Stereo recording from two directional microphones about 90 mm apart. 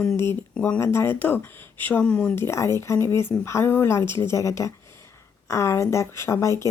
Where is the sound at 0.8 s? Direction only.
30° left (ahead or behind).